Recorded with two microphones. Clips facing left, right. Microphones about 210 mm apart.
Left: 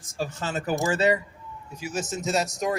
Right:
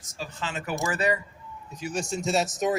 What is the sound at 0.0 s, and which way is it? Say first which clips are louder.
Speech: left 5 dB; 50° left (ahead or behind).